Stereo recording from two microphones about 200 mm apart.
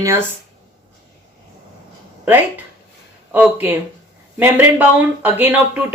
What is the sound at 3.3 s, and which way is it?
Speech, 10° right (ahead or behind).